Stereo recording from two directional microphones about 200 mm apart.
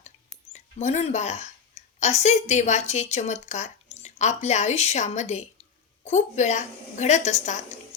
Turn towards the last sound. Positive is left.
turn(degrees=35)  # may be behind; listen again after turning